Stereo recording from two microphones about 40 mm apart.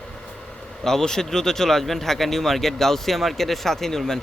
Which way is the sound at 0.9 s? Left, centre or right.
Centre.